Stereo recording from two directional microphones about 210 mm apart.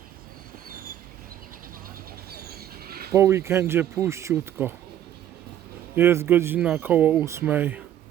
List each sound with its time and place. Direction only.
2.3 s a sound: 45° right (ahead or behind)
3.1 s speech: 15° right (ahead or behind)
6.0 s speech: 10° right (ahead or behind)